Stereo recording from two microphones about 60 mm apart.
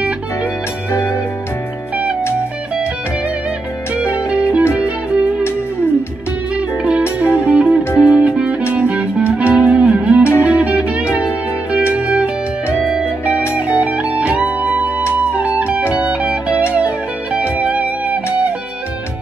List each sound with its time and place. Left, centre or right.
4.3 s music: right
6.8 s music: centre
13.2 s music: left
13.6 s music: right